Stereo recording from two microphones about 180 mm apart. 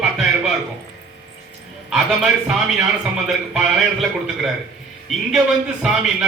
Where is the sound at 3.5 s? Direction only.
Centre (ahead or behind).